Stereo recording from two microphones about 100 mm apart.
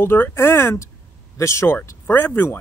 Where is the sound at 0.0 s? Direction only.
20° left (ahead or behind).